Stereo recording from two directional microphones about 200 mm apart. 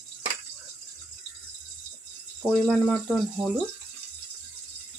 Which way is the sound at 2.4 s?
Centre (ahead or behind).